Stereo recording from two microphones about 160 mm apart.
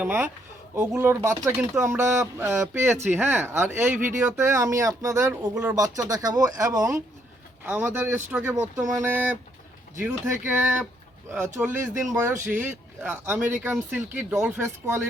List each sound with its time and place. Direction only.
0.0 s speech: 15° right (ahead or behind)